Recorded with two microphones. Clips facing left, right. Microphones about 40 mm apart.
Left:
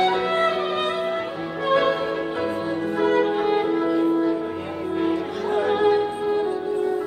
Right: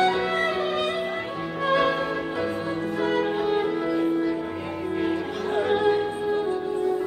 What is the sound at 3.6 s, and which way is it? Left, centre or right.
Music, centre.